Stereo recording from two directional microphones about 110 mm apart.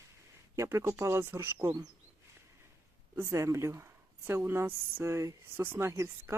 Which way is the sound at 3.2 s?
25° right (ahead or behind).